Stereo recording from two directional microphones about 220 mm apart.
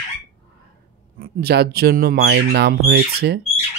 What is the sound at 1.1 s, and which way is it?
Speech, 45° right (ahead or behind).